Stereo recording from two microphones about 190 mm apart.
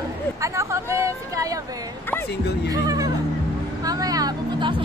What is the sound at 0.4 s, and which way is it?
Speech, 15° right (ahead or behind).